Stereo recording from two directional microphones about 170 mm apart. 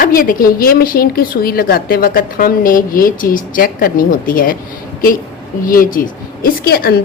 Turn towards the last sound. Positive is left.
turn(degrees=65)  # may be behind; listen again after turning